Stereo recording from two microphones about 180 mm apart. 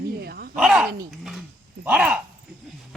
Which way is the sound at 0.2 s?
60° right (ahead or behind).